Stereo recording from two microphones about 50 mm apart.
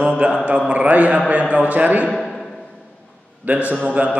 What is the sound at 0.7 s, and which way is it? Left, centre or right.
A man's voice, right.